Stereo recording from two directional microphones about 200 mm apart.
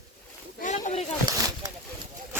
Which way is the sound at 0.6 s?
35° left (ahead or behind).